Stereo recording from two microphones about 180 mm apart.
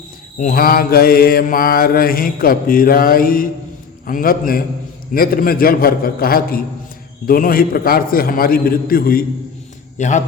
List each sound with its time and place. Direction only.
0.3 s mantra: 50° left (ahead or behind)
10.0 s a man's voice: 40° left (ahead or behind)